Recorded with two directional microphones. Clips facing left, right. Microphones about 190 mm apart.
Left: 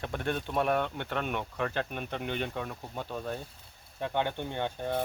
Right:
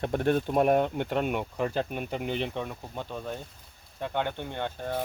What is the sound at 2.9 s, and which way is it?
Speech, 5° left (ahead or behind).